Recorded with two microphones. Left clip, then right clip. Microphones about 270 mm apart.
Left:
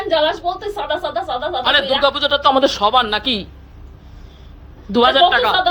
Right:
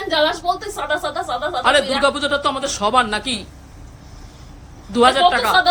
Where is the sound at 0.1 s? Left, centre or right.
Centre.